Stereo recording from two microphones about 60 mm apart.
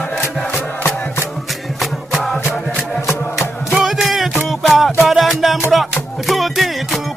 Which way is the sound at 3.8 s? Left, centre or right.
Centre.